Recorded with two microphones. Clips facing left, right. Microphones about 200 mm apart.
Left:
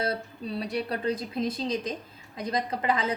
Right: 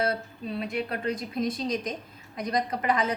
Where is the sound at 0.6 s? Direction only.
35° left (ahead or behind).